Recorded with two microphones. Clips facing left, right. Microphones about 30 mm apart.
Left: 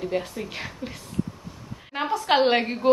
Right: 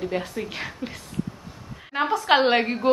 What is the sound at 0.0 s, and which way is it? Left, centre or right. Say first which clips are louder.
Speech: even; centre.